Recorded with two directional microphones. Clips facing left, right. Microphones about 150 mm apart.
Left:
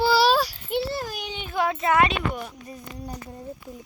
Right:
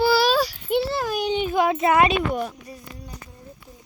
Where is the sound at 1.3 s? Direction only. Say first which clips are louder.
Right 4 dB; 20° right (ahead or behind).